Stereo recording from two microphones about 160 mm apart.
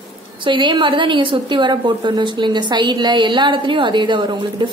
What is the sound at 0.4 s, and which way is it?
A woman's voice, 30° right (ahead or behind).